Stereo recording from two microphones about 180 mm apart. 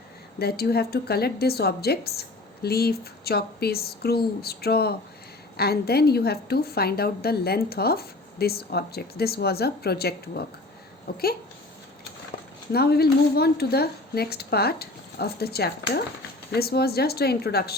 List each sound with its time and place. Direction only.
0.3 s a woman's voice: 60° left (ahead or behind)
12.7 s a woman's voice: 60° left (ahead or behind)